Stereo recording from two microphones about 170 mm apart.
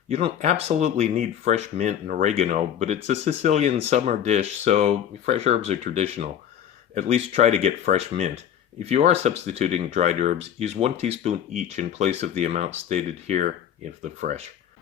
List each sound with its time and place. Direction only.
0.1 s speech: 35° right (ahead or behind)